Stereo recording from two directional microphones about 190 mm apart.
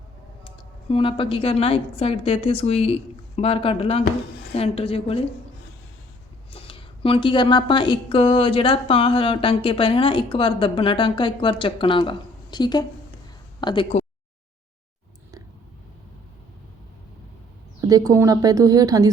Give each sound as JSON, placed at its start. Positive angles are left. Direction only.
{"t": 0.4, "sound": "a woman's voice", "side_deg": 30}
{"t": 6.5, "sound": "speech", "side_deg": 30}
{"t": 17.7, "sound": "a woman's voice", "side_deg": -20}